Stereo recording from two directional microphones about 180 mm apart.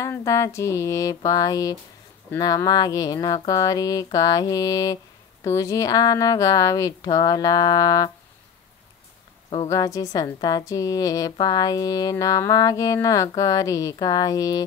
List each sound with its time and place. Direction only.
0.0 s a sound: 15° left (ahead or behind)
2.3 s a woman's voice: 20° left (ahead or behind)
9.7 s a woman's voice: 20° left (ahead or behind)